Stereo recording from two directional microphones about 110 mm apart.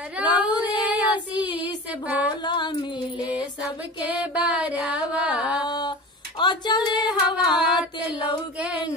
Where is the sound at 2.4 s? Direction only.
45° left (ahead or behind).